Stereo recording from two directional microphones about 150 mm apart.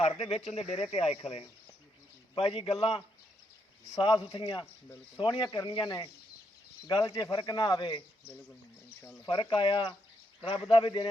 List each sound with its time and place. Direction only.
0.3 s speech: 45° left (ahead or behind)
3.8 s speech: 30° left (ahead or behind)